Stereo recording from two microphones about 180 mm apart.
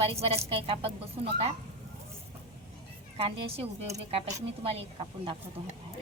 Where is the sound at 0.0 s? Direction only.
35° right (ahead or behind).